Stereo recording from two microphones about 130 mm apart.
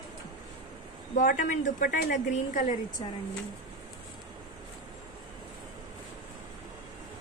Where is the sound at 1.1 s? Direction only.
85° left.